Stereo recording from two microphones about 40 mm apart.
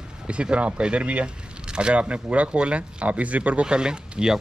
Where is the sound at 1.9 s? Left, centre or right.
Right.